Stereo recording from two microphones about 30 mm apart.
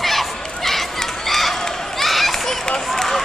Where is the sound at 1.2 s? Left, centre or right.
Centre.